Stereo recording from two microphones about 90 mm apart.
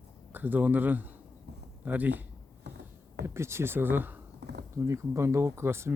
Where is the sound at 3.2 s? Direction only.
30° right (ahead or behind).